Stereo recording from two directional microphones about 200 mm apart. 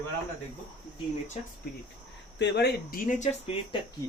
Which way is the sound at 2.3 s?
60° left (ahead or behind).